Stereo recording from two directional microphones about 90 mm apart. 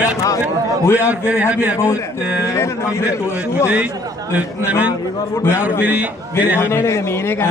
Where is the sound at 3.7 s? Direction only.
15° right (ahead or behind).